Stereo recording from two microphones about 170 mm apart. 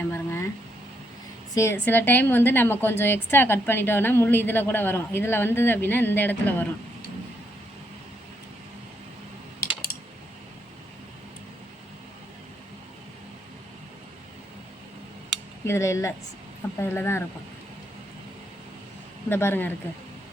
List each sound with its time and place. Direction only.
0.0 s a sound: 15° left (ahead or behind)
1.5 s a woman's voice: 15° left (ahead or behind)
15.6 s a woman's voice: 15° left (ahead or behind)
19.3 s a woman's voice: 15° left (ahead or behind)